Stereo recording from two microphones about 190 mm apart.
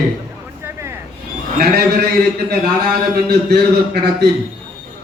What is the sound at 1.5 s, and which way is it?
A man's voice, 55° right (ahead or behind).